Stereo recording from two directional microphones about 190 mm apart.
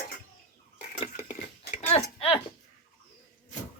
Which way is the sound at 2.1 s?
30° left (ahead or behind).